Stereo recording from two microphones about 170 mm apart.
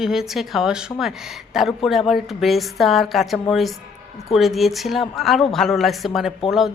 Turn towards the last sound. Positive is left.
turn(degrees=0)  # may be behind; listen again after turning